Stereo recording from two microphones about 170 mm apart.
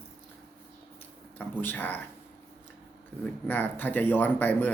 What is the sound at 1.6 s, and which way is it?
Speech, 10° left (ahead or behind).